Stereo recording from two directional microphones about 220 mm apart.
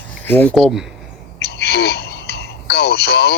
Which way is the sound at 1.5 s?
45° left (ahead or behind).